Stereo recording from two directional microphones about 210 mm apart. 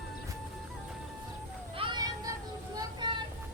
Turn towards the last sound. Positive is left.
turn(degrees=-20)  # may be behind; listen again after turning